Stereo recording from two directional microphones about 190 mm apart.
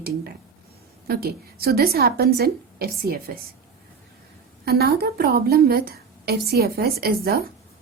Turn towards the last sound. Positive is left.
turn(degrees=-55)  # may be behind; listen again after turning